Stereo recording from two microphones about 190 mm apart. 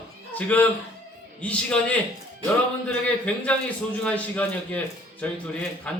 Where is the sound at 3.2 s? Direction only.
5° left (ahead or behind).